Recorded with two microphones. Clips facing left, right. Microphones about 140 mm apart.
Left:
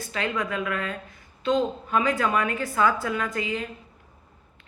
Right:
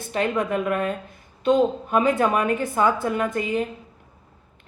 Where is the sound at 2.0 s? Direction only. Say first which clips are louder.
Right 4 dB; 25° right (ahead or behind).